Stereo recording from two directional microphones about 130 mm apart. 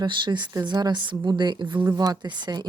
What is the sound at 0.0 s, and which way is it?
Speech, 35° right (ahead or behind).